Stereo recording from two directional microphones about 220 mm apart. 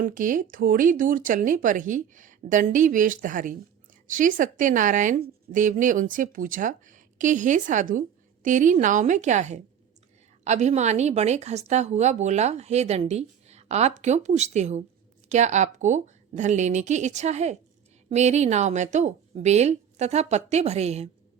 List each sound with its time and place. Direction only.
0.0 s a woman's voice: 40° right (ahead or behind)